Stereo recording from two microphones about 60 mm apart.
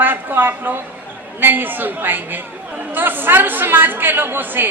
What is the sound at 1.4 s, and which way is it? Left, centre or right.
A woman's voice, right.